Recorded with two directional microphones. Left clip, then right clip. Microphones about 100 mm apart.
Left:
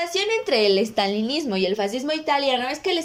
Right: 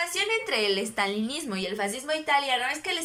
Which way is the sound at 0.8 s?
20° left (ahead or behind).